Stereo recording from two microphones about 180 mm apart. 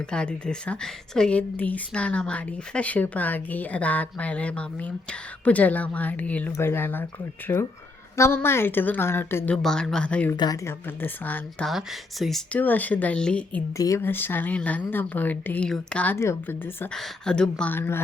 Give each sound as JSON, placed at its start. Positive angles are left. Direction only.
{"t": 0.1, "sound": "speech", "side_deg": 5}
{"t": 10.3, "sound": "speech", "side_deg": 20}
{"t": 11.7, "sound": "speech", "side_deg": 0}
{"t": 13.7, "sound": "speech", "side_deg": 15}